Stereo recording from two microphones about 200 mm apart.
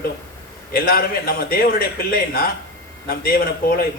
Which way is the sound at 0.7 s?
50° left (ahead or behind).